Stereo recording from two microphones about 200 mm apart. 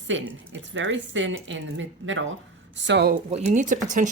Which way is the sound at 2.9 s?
55° right (ahead or behind).